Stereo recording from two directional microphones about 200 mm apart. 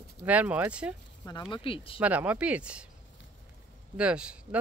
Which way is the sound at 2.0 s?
5° right (ahead or behind).